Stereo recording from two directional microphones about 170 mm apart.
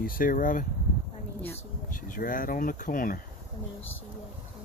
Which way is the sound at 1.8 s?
55° left (ahead or behind).